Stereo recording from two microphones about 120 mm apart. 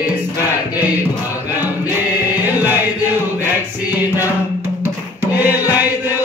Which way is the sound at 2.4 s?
15° right (ahead or behind).